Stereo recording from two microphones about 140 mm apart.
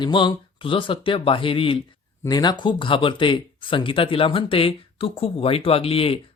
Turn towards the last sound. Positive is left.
turn(degrees=45)  # may be behind; listen again after turning